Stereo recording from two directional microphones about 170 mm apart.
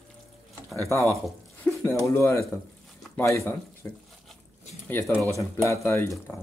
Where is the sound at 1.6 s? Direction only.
10° left (ahead or behind).